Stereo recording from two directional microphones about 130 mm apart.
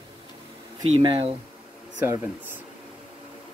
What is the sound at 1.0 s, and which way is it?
Speech, 40° right (ahead or behind).